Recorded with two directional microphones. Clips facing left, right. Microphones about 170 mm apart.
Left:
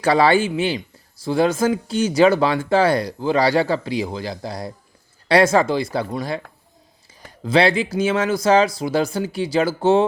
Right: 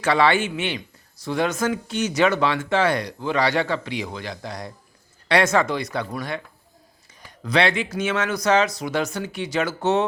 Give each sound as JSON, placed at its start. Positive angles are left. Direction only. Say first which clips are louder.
{"t": 0.0, "sound": "speech", "louder": "left 4 dB", "side_deg": 35}
{"t": 7.4, "sound": "speech", "louder": "left 4 dB", "side_deg": 30}